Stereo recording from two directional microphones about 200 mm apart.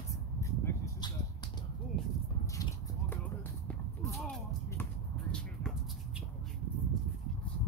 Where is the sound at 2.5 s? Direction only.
15° left (ahead or behind).